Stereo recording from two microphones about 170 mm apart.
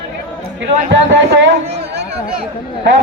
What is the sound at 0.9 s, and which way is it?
Speech, 90° right.